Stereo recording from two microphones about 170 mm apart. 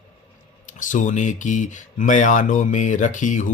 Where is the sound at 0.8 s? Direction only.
50° left (ahead or behind).